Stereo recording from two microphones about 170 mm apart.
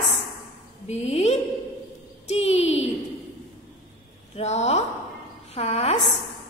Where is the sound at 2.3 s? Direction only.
40° left (ahead or behind).